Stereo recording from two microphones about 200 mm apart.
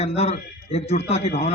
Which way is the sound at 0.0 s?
30° left (ahead or behind).